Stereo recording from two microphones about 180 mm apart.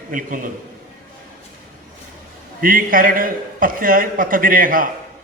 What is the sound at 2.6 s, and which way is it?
A man's voice, 50° right (ahead or behind).